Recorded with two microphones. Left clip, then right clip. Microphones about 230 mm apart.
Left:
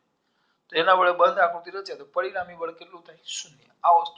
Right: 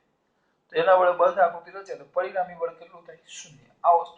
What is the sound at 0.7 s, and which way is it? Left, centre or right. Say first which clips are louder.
A man's voice: even; left.